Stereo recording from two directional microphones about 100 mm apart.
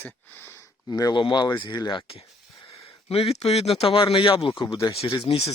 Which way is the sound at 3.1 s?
80° left.